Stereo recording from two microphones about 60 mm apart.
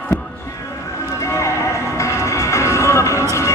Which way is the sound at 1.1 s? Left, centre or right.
Left.